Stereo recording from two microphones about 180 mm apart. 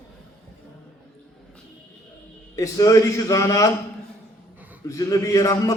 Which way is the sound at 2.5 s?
20° left (ahead or behind).